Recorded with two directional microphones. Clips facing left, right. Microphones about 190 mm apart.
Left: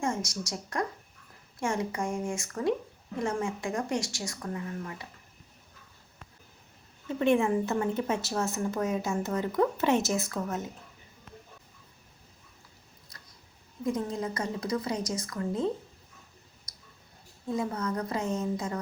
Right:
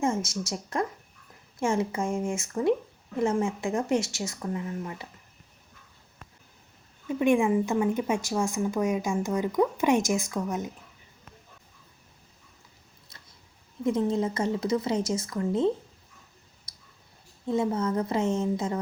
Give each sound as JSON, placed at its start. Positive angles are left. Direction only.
{"t": 0.0, "sound": "speech", "side_deg": -25}
{"t": 7.1, "sound": "a woman's voice", "side_deg": -15}
{"t": 13.8, "sound": "speech", "side_deg": -25}
{"t": 16.7, "sound": "clicking", "side_deg": -30}
{"t": 17.5, "sound": "speech", "side_deg": -25}